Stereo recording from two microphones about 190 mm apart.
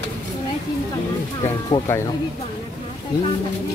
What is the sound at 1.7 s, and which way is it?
Speech, 15° left (ahead or behind).